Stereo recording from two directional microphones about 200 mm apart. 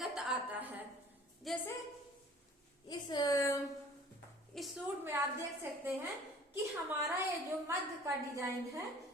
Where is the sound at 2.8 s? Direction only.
20° left (ahead or behind).